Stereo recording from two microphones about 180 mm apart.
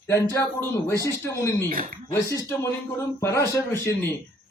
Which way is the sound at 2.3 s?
15° left (ahead or behind).